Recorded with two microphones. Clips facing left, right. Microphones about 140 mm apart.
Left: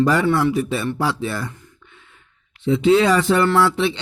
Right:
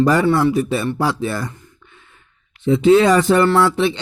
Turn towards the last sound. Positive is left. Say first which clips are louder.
# right 2 dB
turn(degrees=-45)  # may be behind; listen again after turning